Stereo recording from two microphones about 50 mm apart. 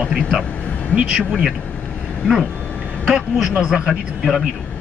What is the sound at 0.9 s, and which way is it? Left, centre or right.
Speech, centre.